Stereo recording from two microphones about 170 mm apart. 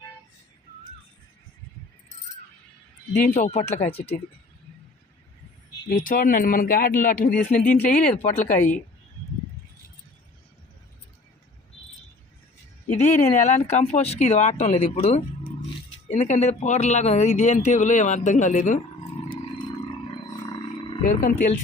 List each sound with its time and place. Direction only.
3.2 s speech: 45° left (ahead or behind)
5.9 s speech: 55° left (ahead or behind)
12.9 s speech: 45° left (ahead or behind)
21.0 s speech: 50° left (ahead or behind)